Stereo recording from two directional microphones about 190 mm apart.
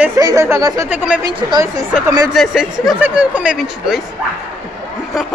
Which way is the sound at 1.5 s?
20° right (ahead or behind).